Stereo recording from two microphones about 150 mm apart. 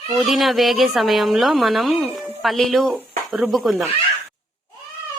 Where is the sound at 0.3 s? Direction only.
Centre (ahead or behind).